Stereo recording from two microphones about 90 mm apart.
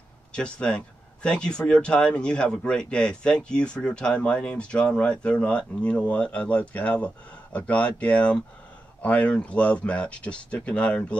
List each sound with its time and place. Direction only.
0.3 s speech: 10° left (ahead or behind)